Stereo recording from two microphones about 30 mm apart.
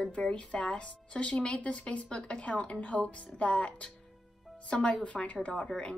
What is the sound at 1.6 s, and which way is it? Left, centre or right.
Speech, left.